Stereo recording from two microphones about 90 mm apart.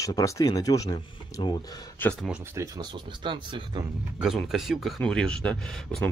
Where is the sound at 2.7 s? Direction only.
65° right (ahead or behind).